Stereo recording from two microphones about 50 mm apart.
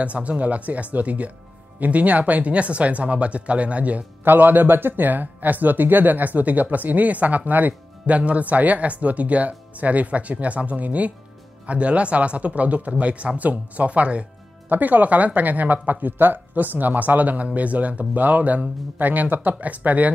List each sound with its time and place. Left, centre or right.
0.0 s speech: right
4.2 s speech: right
14.7 s speech: right